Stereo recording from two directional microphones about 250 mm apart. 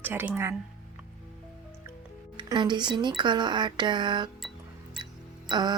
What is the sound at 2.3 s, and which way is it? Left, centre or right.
Speech, centre.